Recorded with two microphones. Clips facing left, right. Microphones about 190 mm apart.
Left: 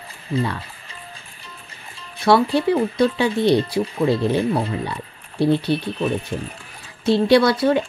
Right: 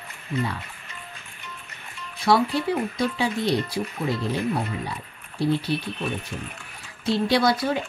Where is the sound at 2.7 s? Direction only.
65° left (ahead or behind).